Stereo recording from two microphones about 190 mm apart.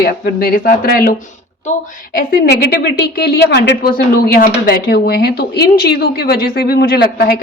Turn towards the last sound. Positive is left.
turn(degrees=55)  # may be behind; listen again after turning